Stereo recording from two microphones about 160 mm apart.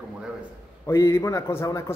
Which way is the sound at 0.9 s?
20° left (ahead or behind).